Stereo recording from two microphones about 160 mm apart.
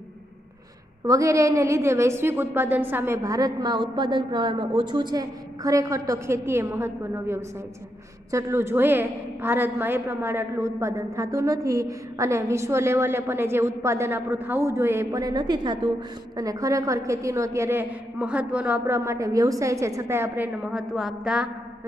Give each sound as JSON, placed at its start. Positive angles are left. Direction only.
{"t": 1.0, "sound": "a woman's voice", "side_deg": -20}